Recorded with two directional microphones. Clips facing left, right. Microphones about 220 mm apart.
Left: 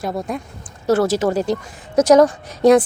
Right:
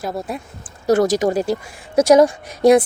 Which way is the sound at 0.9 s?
15° right (ahead or behind).